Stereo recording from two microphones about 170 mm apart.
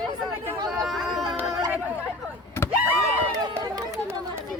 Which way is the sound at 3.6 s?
20° right (ahead or behind).